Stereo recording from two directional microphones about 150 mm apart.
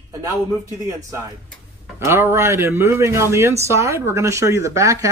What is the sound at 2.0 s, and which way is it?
Speech, 15° right (ahead or behind).